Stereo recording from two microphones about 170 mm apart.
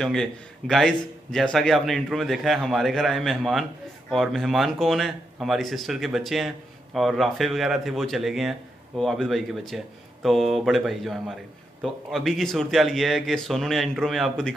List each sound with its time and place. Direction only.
0.0 s speech: centre (ahead or behind)